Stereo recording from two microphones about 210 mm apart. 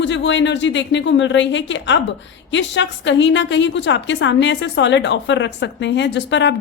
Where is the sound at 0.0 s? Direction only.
60° left (ahead or behind).